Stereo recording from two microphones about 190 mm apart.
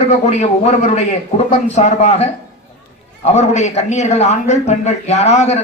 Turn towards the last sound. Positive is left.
turn(degrees=35)  # may be behind; listen again after turning